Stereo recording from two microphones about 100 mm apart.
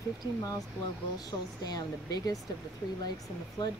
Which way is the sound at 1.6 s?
40° left (ahead or behind).